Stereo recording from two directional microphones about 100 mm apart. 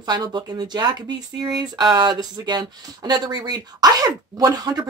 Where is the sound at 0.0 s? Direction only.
45° right (ahead or behind).